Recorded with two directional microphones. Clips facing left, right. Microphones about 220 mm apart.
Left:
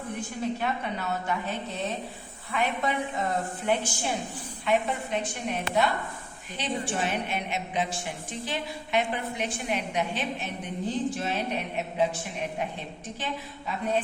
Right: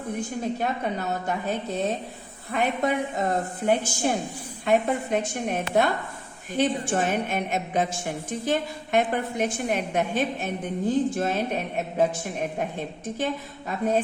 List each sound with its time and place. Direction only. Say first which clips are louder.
0.6 s a woman's voice: right 3 dB; 40° right (ahead or behind)